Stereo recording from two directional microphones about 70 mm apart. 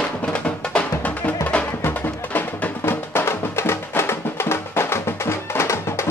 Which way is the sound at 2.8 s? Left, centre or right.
Left.